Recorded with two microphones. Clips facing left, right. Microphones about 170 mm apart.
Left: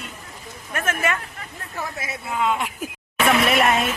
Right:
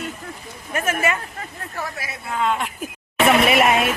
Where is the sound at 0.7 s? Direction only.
10° right (ahead or behind).